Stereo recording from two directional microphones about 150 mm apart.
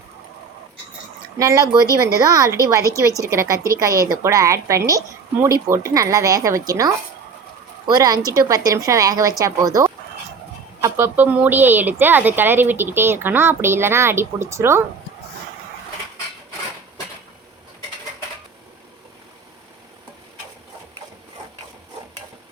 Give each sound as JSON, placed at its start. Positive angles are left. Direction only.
{"t": 1.4, "sound": "a woman's voice", "side_deg": -25}